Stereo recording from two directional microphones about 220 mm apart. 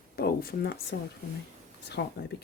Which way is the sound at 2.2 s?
50° left (ahead or behind).